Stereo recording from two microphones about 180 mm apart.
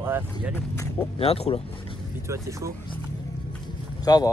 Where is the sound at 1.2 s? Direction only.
35° left (ahead or behind).